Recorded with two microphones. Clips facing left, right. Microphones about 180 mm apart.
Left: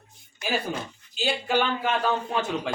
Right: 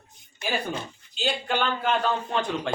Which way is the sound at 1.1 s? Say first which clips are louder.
Left 2 dB; 5° left (ahead or behind).